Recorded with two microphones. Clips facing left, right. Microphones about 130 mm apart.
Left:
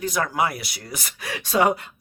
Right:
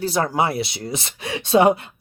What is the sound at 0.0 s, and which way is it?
Speech, 30° right (ahead or behind).